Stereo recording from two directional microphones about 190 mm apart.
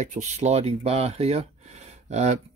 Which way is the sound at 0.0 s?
35° right (ahead or behind).